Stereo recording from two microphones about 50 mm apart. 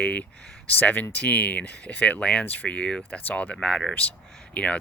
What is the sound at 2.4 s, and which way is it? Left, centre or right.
Speech, left.